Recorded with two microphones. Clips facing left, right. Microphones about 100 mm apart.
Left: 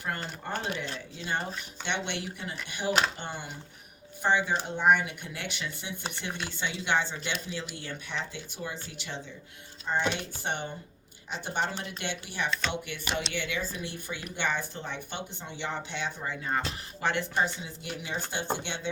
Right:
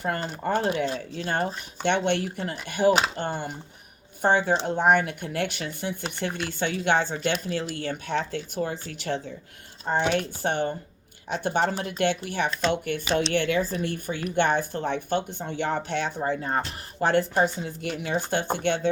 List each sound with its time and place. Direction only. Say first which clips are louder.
0.0 s speech: right 7 dB; 45° right (ahead or behind)